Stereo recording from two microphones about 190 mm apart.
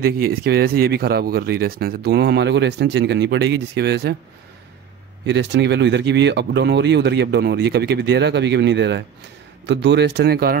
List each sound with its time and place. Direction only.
0.0 s speech: 55° right (ahead or behind)
5.2 s speech: 65° right (ahead or behind)